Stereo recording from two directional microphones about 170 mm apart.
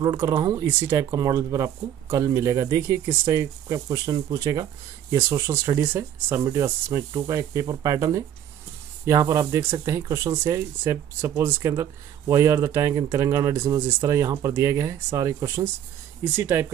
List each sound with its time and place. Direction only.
0.0 s speech: 25° right (ahead or behind)